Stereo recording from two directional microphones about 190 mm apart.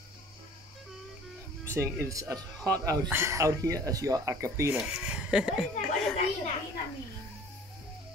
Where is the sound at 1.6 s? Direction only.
15° right (ahead or behind).